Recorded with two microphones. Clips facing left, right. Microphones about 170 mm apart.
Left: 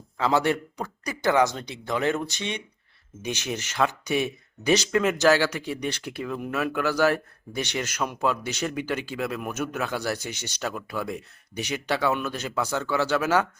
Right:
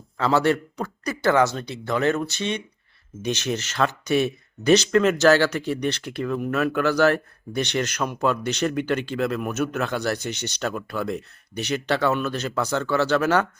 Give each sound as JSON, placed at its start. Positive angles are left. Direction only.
{"t": 0.2, "sound": "speech", "side_deg": 15}